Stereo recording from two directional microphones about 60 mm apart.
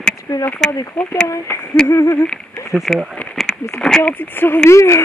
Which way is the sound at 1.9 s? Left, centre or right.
Left.